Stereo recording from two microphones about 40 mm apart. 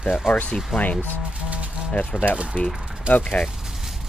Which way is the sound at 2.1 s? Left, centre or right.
Left.